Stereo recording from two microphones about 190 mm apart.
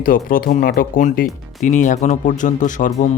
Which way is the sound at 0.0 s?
50° left (ahead or behind).